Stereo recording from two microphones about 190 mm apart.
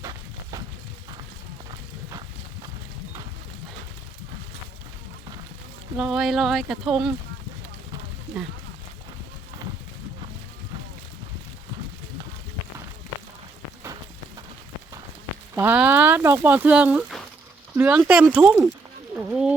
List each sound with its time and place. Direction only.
0.0 s a sound: 20° right (ahead or behind)
6.0 s speech: 5° right (ahead or behind)
15.5 s speech: 10° right (ahead or behind)